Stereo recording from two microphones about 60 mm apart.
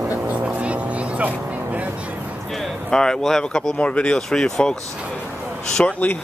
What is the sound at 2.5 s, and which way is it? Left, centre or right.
Speech, centre.